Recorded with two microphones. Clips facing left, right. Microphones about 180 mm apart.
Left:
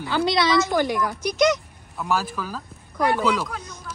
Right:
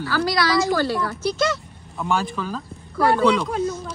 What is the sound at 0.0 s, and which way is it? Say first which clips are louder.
A woman's voice: even; 20° left (ahead or behind).